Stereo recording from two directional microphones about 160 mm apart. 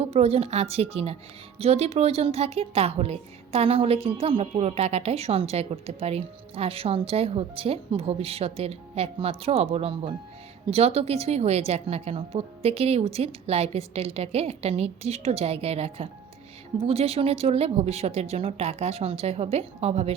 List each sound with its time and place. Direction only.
0.0 s a woman's voice: 40° right (ahead or behind)